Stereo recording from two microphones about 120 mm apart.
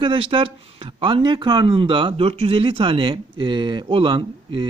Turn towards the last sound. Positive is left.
turn(degrees=-45)  # may be behind; listen again after turning